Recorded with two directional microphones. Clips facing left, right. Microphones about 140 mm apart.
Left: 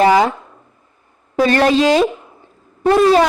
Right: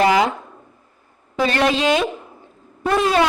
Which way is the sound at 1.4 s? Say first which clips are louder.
Left 5 dB; 40° left (ahead or behind).